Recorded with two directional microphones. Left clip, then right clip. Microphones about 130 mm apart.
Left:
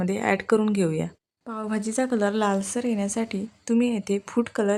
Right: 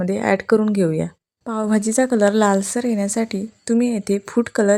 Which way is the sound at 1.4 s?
50° right (ahead or behind).